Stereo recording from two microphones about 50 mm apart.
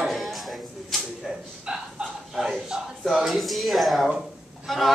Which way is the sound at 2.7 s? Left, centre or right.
Centre.